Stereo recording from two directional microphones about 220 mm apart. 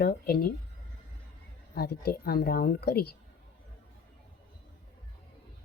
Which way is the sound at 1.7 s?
45° left (ahead or behind).